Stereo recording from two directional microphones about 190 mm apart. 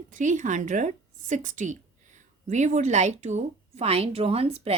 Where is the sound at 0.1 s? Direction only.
40° right (ahead or behind).